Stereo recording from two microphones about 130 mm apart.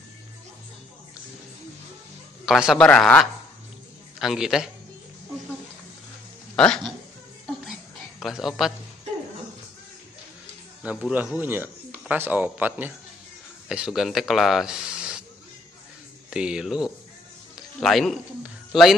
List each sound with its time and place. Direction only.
2.4 s speech: centre (ahead or behind)
4.2 s speech: 5° right (ahead or behind)
6.5 s speech: 5° left (ahead or behind)
8.2 s speech: centre (ahead or behind)
10.8 s speech: 10° right (ahead or behind)
16.3 s speech: 5° right (ahead or behind)
17.6 s music: centre (ahead or behind)
18.4 s a sound: centre (ahead or behind)